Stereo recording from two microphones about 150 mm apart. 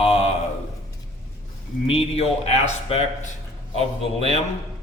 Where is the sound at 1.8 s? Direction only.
40° left (ahead or behind).